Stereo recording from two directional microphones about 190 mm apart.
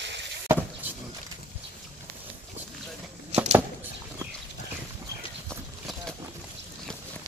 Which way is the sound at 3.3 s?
5° right (ahead or behind).